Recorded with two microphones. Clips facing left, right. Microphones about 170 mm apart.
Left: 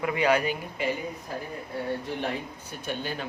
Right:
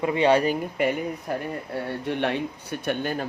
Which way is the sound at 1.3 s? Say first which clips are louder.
Right 6 dB; 65° right (ahead or behind).